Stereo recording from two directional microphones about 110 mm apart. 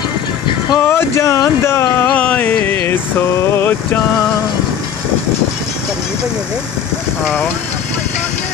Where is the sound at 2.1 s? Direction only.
15° left (ahead or behind).